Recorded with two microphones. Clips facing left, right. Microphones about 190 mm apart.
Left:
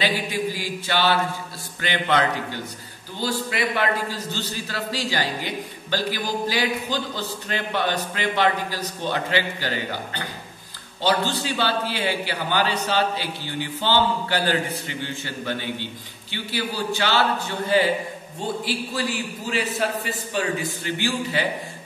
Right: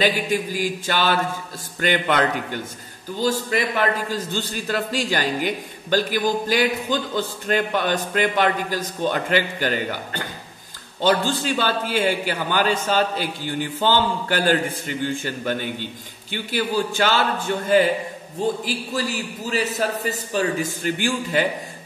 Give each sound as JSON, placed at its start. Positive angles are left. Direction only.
{"t": 0.0, "sound": "a man's voice", "side_deg": -45}
{"t": 11.0, "sound": "a man's voice", "side_deg": -50}
{"t": 19.5, "sound": "speech", "side_deg": -40}